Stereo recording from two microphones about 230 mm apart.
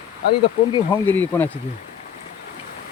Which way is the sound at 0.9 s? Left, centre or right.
Centre.